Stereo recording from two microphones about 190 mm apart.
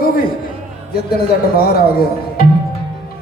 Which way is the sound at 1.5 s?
50° left (ahead or behind).